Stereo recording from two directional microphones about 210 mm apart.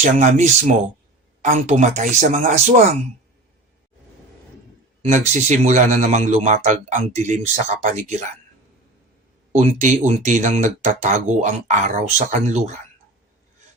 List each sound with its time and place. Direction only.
0.0 s speech: 35° right (ahead or behind)
5.3 s speech: 35° right (ahead or behind)
9.5 s speech: 35° right (ahead or behind)